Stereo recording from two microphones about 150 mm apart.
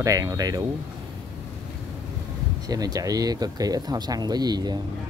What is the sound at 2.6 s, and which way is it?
Speech, 25° right (ahead or behind).